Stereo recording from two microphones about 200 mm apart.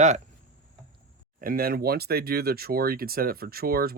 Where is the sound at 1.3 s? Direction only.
45° right (ahead or behind).